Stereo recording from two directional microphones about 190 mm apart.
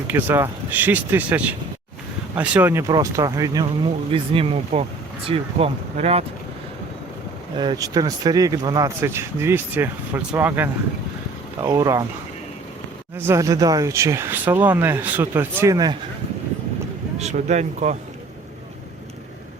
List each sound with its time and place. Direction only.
0.1 s speech: 10° right (ahead or behind)
4.1 s speech: 30° right (ahead or behind)
7.6 s speech: 20° right (ahead or behind)
13.1 s speech: 15° right (ahead or behind)
17.2 s speech: 35° right (ahead or behind)